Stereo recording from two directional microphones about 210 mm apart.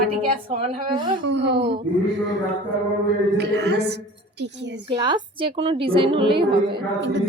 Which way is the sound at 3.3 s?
50° right (ahead or behind).